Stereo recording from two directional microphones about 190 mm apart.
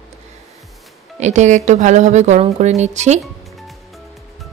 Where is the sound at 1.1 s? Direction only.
40° right (ahead or behind).